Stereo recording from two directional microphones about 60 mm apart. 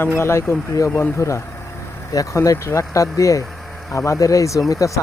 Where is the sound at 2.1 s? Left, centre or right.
Left.